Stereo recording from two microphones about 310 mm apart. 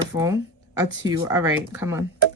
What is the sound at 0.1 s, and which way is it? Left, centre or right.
Speech, centre.